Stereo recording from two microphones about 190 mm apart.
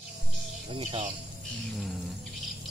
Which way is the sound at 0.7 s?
30° right (ahead or behind).